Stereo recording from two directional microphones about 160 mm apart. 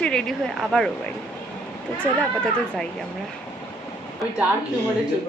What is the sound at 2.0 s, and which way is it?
Speech, 5° left (ahead or behind).